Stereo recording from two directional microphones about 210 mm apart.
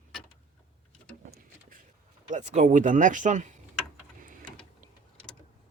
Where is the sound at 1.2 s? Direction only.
40° right (ahead or behind).